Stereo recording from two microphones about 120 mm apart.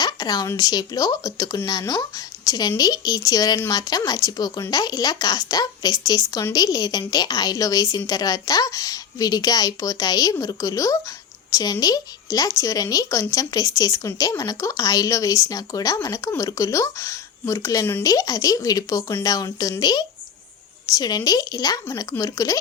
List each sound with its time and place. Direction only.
0.0 s a woman's voice: 35° left (ahead or behind)